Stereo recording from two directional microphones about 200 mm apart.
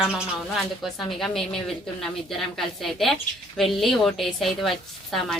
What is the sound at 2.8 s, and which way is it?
A woman's voice, centre (ahead or behind).